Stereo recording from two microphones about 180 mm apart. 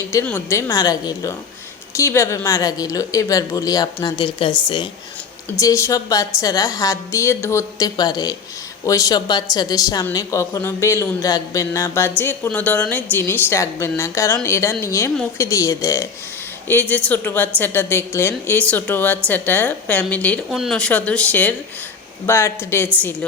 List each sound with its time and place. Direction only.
0.1 s a woman's voice: 15° left (ahead or behind)
5.5 s a woman's voice: 15° left (ahead or behind)